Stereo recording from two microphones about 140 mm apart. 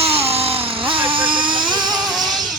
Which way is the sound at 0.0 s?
45° right (ahead or behind).